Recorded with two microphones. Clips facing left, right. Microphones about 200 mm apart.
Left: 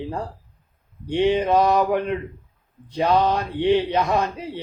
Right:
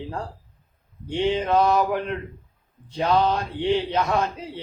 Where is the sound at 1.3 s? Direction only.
20° left (ahead or behind).